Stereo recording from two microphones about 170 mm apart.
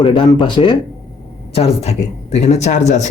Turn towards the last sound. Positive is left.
turn(degrees=45)  # may be behind; listen again after turning